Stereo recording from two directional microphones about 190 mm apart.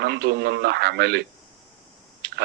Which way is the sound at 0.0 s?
60° right (ahead or behind).